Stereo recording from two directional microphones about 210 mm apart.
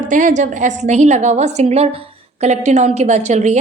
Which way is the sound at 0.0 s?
35° right (ahead or behind).